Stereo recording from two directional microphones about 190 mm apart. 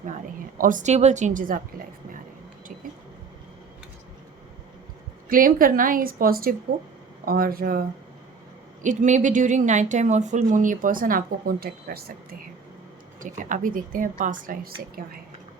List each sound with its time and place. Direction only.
0.0 s a woman's voice: 45° right (ahead or behind)
5.3 s a woman's voice: 45° right (ahead or behind)